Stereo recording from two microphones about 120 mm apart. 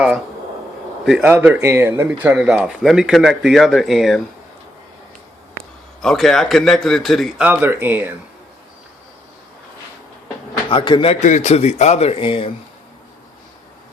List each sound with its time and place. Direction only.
1.0 s a man's voice: centre (ahead or behind)
1.3 s speech: 15° right (ahead or behind)
6.0 s a man's voice: centre (ahead or behind)
7.4 s speech: 15° right (ahead or behind)
10.7 s a man's voice: 45° left (ahead or behind)
11.1 s speech: 80° left; by 12.5 s 45° left (ahead or behind)